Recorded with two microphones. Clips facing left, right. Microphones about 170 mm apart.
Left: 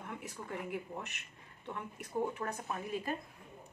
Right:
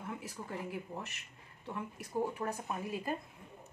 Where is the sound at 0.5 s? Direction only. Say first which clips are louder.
Left 1 dB; centre (ahead or behind).